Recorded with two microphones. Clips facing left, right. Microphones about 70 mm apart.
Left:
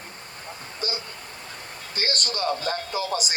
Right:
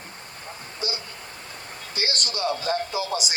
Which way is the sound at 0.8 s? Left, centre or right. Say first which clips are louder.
Even; left.